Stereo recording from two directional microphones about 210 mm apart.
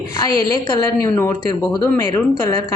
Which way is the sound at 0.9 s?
15° left (ahead or behind).